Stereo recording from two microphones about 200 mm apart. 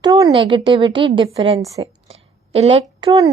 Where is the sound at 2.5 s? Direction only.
30° right (ahead or behind).